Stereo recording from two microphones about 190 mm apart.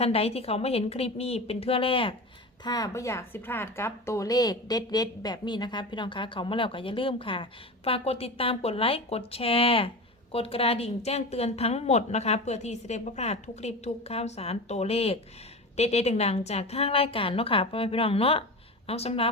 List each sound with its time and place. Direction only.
0.0 s a woman's voice: 30° left (ahead or behind)